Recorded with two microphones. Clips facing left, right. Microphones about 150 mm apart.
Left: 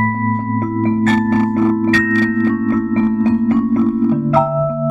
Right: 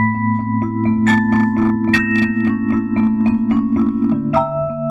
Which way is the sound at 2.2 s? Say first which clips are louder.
Left 1 dB; 35° left (ahead or behind).